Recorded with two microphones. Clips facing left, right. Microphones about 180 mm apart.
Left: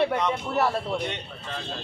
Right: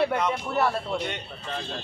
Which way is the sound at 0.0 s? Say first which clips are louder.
Even; 5° right (ahead or behind).